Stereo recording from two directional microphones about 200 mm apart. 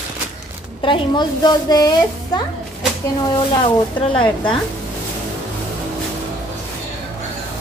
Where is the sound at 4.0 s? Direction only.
25° left (ahead or behind).